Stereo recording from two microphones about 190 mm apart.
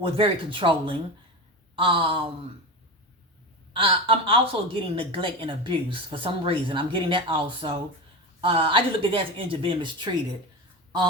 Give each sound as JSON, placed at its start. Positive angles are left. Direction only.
{"t": 0.0, "sound": "a woman's voice", "side_deg": -25}
{"t": 3.7, "sound": "a woman's voice", "side_deg": -30}